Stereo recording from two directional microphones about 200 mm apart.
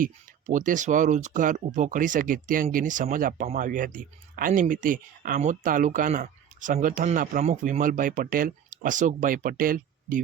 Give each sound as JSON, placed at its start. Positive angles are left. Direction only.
{"t": 0.0, "sound": "speech", "side_deg": -40}